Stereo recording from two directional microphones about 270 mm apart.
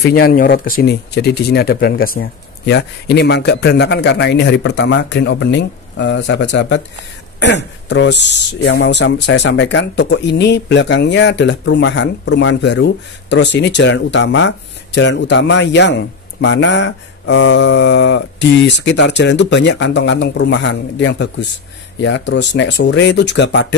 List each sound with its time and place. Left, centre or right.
0.0 s speech: left